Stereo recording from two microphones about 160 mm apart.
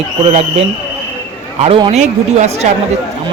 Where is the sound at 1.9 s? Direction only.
45° right (ahead or behind).